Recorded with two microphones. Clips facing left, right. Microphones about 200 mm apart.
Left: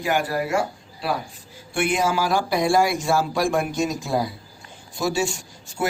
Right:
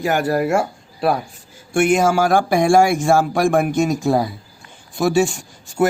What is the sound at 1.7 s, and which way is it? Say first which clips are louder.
A man's voice: right 7 dB; 45° right (ahead or behind).